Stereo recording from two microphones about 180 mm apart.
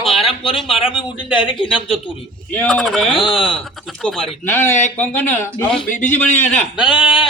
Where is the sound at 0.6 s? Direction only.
Centre (ahead or behind).